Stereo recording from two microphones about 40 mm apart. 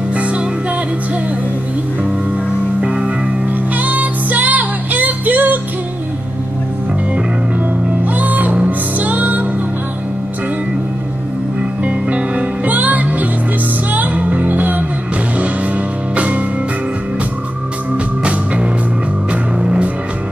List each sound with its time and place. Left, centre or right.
0.1 s music: right
2.8 s music: right
3.4 s music: right
8.0 s music: right
11.8 s music: right
16.2 s music: right
19.6 s music: right